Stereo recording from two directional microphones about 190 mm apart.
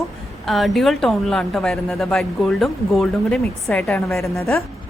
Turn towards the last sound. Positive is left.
turn(degrees=0)  # may be behind; listen again after turning